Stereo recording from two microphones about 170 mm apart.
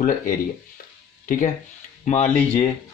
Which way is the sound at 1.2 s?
55° left (ahead or behind).